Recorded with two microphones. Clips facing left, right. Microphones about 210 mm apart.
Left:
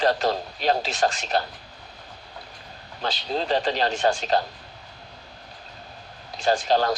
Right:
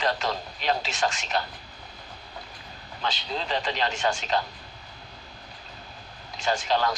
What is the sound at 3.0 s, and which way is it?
A man's voice, 40° left (ahead or behind).